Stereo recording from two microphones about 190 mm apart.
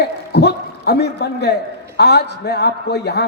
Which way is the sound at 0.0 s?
60° left (ahead or behind).